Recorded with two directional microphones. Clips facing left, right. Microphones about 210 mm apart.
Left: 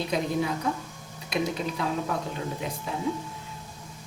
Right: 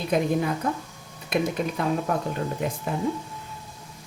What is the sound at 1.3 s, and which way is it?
Speech, 50° right (ahead or behind).